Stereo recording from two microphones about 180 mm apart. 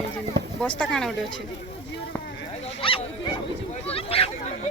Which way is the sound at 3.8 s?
35° left (ahead or behind).